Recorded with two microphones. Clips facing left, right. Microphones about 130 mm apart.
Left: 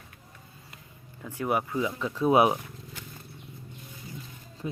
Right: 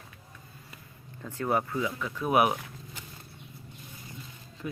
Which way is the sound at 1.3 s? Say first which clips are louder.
Even; 10° left (ahead or behind).